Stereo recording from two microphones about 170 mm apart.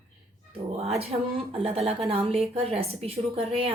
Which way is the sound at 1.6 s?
35° right (ahead or behind).